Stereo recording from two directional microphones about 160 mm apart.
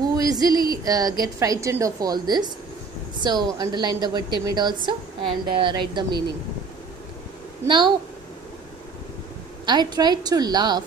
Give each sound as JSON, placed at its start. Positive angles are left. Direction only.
{"t": 0.0, "sound": "a woman's voice", "side_deg": -25}
{"t": 7.6, "sound": "a woman's voice", "side_deg": -30}
{"t": 9.7, "sound": "a woman's voice", "side_deg": -25}